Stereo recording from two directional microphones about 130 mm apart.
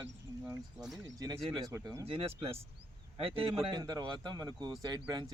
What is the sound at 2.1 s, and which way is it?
Speech, 45° right (ahead or behind).